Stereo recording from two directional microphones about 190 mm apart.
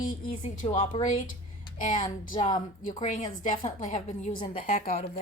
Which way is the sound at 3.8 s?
45° left (ahead or behind).